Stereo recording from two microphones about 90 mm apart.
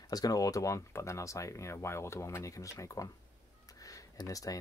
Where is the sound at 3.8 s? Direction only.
40° left (ahead or behind).